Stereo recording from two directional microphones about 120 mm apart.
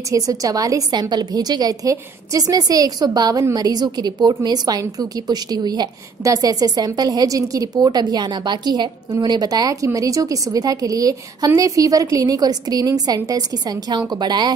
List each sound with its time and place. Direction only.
0.1 s a woman's voice: 30° right (ahead or behind)